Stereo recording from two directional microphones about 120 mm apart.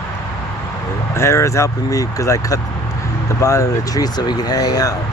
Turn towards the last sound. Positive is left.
turn(degrees=30)  # may be behind; listen again after turning